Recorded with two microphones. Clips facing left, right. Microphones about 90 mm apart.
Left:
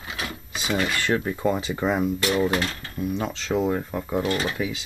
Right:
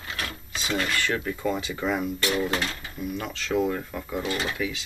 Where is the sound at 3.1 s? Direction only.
25° left (ahead or behind).